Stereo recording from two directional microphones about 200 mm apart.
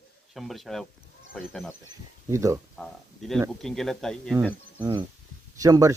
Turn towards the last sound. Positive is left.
turn(degrees=-15)  # may be behind; listen again after turning